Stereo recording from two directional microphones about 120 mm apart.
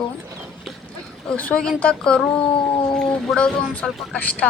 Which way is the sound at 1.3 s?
10° left (ahead or behind).